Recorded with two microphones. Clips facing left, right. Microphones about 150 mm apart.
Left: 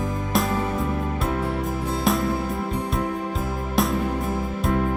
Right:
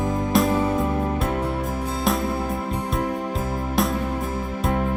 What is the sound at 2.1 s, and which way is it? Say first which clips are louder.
Music: even; centre (ahead or behind).